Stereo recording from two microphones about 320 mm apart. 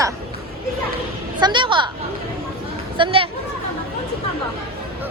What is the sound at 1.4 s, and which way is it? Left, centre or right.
Speech, centre.